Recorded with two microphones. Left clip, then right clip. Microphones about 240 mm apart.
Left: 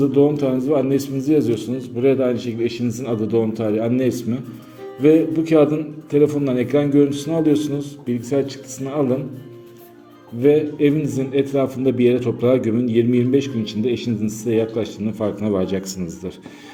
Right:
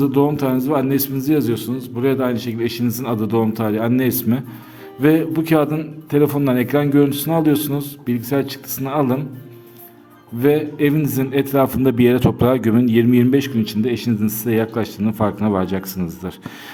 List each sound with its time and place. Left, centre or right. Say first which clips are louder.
0.0 s a man's voice: left 1 dB; right
10.4 s a man's voice: left 1 dB; right